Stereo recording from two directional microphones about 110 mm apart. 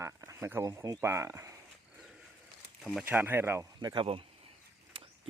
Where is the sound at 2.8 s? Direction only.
Centre (ahead or behind).